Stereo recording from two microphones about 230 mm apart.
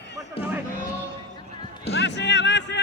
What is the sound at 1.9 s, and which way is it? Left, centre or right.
Music, left.